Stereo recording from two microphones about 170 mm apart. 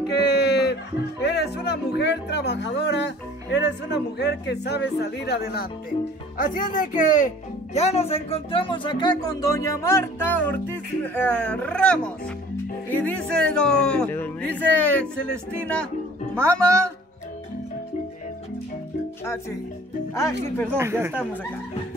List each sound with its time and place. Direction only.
0.1 s a sound: 75° left (ahead or behind)
1.2 s speech: 75° left (ahead or behind)
6.3 s speech: 55° left (ahead or behind)
7.7 s speech: 40° left (ahead or behind); by 15.9 s 5° left (ahead or behind)
20.2 s speech: 15° left (ahead or behind)
20.7 s speech: 15° right (ahead or behind)